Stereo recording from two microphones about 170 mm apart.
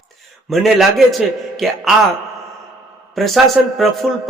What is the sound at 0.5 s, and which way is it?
A man's voice, centre (ahead or behind).